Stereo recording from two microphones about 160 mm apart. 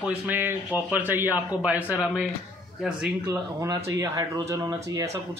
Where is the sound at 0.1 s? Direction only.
10° right (ahead or behind).